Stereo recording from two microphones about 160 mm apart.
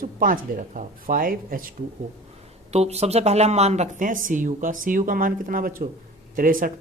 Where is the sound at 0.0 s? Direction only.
60° right (ahead or behind).